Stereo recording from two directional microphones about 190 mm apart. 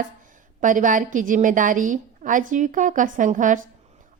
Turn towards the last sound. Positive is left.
turn(degrees=-40)  # may be behind; listen again after turning